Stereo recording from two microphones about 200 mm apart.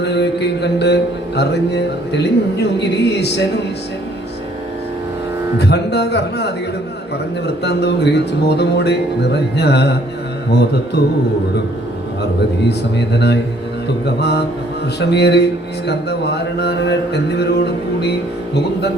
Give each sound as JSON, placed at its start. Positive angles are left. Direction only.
{"t": 0.0, "sound": "a man's voice", "side_deg": 55}
{"t": 1.4, "sound": "mantra", "side_deg": 55}
{"t": 5.5, "sound": "mantra", "side_deg": 55}
{"t": 13.1, "sound": "mantra", "side_deg": 55}